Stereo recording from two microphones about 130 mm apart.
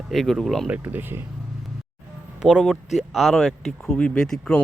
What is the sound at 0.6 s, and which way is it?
Speech, 15° right (ahead or behind).